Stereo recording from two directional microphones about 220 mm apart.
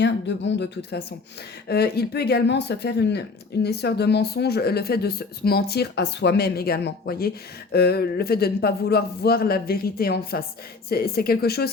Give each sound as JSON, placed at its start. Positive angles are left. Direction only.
{"t": 0.0, "sound": "speech", "side_deg": 55}